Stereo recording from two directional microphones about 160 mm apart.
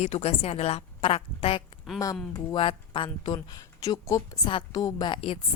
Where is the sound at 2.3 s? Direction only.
30° left (ahead or behind).